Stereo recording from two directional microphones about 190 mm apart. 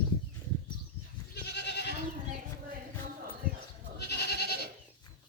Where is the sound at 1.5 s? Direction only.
60° left (ahead or behind).